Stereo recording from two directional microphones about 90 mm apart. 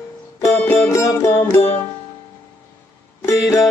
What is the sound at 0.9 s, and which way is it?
Music, 30° left (ahead or behind).